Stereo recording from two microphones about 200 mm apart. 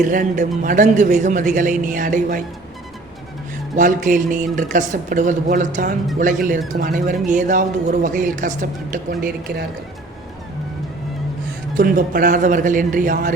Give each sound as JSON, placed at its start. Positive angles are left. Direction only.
{"t": 0.0, "sound": "a woman's voice", "side_deg": -40}
{"t": 3.8, "sound": "a woman's voice", "side_deg": -40}
{"t": 11.8, "sound": "a woman's voice", "side_deg": -45}